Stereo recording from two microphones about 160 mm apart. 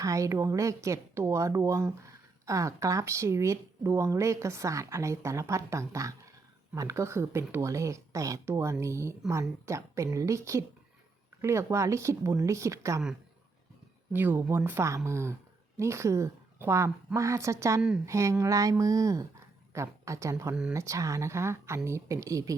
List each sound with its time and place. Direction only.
0.0 s speech: 20° right (ahead or behind)
14.1 s a woman's voice: 10° right (ahead or behind)